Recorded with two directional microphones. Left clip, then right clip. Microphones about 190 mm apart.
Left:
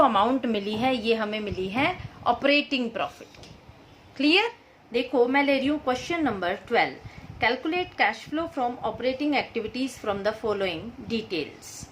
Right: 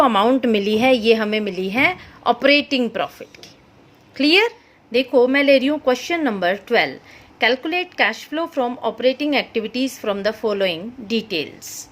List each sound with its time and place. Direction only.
0.0 s a woman's voice: 45° right (ahead or behind)
4.2 s a woman's voice: 45° right (ahead or behind)